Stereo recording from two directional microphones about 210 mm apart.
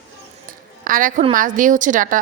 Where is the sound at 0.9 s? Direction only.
40° right (ahead or behind).